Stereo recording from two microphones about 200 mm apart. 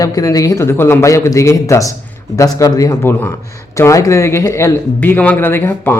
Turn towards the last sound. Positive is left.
turn(degrees=10)  # may be behind; listen again after turning